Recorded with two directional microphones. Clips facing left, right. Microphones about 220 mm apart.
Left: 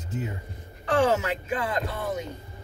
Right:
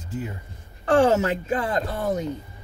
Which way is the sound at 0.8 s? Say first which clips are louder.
Right 5 dB; 50° right (ahead or behind).